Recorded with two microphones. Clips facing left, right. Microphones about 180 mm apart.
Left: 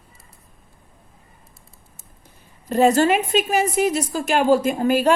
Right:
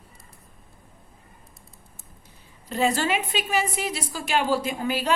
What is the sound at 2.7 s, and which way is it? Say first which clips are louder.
A woman's voice: left 8 dB; 45° left (ahead or behind).